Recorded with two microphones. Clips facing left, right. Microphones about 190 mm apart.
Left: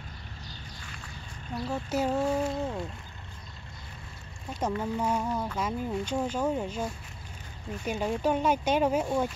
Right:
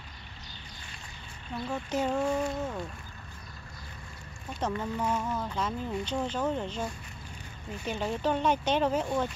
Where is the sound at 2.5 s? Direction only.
25° left (ahead or behind).